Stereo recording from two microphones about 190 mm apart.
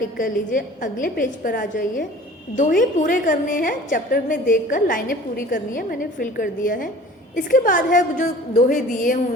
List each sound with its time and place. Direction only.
0.2 s a woman's voice: 45° left (ahead or behind)